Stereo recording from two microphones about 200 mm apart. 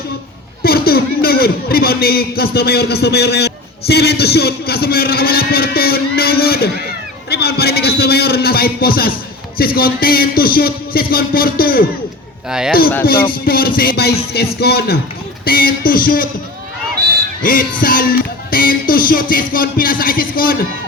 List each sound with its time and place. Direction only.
0.6 s a man's voice: 50° left (ahead or behind)
12.5 s speech: 5° right (ahead or behind)
13.3 s a man's voice: 45° left (ahead or behind)
17.4 s a man's voice: 45° left (ahead or behind)